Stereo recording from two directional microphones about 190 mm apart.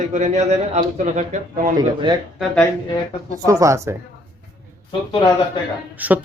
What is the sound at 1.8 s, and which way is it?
Speech, 20° right (ahead or behind).